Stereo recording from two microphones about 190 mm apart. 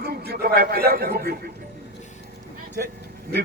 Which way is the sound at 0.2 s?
55° right (ahead or behind).